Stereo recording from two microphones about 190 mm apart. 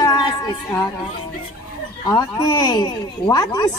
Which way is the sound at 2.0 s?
20° left (ahead or behind).